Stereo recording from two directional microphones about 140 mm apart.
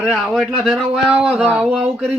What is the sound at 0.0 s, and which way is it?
Speech, 5° right (ahead or behind).